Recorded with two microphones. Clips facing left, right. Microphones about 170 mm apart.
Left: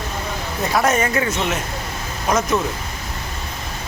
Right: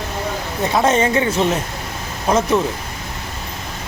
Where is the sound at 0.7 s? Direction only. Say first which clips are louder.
Right 3 dB; 25° right (ahead or behind).